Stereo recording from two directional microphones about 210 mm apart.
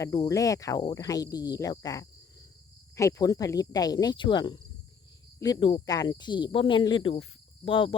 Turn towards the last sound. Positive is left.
turn(degrees=25)  # may be behind; listen again after turning